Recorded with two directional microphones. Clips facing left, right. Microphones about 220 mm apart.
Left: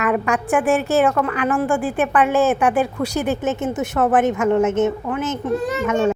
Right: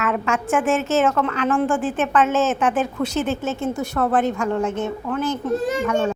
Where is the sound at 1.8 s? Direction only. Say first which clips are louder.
Left 1 dB; 15° left (ahead or behind).